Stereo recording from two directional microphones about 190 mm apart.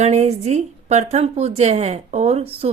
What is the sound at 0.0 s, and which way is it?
A woman's voice, 35° right (ahead or behind).